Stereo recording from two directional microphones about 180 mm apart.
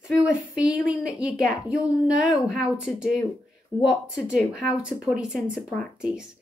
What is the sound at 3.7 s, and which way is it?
Speech, 20° left (ahead or behind).